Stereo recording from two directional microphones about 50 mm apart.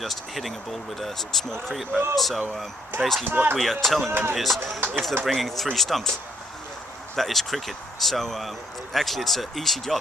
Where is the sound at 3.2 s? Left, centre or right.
Right.